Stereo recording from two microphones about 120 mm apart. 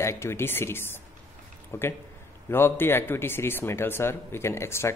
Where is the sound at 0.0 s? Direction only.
20° left (ahead or behind).